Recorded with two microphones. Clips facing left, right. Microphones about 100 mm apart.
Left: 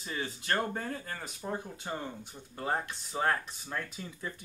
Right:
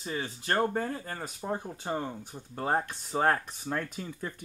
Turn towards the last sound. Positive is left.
turn(degrees=-45)  # may be behind; listen again after turning